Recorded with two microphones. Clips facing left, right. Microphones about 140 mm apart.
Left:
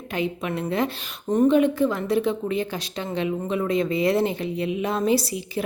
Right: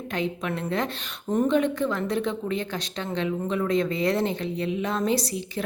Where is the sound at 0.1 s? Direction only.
5° left (ahead or behind).